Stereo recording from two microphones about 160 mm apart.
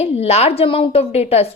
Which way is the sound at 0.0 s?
40° left (ahead or behind).